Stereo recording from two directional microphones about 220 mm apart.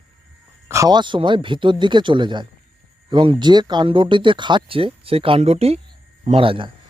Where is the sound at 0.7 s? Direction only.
15° right (ahead or behind).